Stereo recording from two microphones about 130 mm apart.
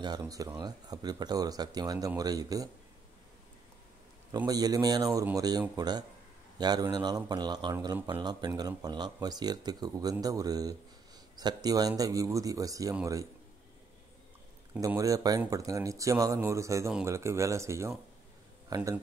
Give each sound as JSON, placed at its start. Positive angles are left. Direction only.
{"t": 0.0, "sound": "speech", "side_deg": -30}
{"t": 4.5, "sound": "speech", "side_deg": -30}
{"t": 15.0, "sound": "speech", "side_deg": -25}